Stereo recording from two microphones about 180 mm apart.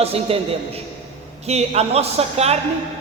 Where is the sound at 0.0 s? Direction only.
35° right (ahead or behind).